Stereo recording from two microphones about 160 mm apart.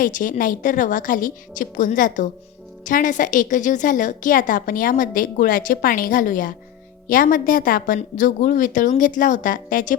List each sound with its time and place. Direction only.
0.0 s a woman's voice: 60° left (ahead or behind)